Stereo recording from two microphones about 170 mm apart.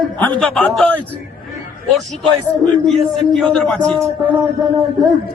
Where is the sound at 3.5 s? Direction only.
5° left (ahead or behind).